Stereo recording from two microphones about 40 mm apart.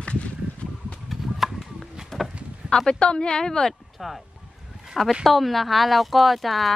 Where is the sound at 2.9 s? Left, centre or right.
Left.